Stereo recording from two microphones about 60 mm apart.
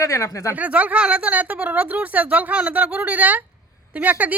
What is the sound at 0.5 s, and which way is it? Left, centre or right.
Speech, right.